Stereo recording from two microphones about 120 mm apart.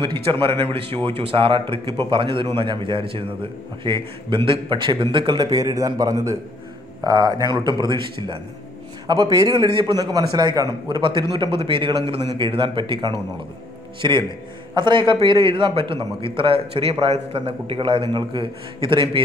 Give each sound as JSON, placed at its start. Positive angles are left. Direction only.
{"t": 0.0, "sound": "a man's voice", "side_deg": -40}